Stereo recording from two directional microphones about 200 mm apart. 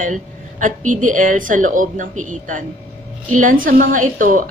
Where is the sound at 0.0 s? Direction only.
40° right (ahead or behind).